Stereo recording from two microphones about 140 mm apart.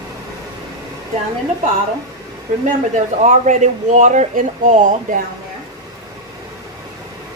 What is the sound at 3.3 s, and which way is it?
Speech, 60° right (ahead or behind).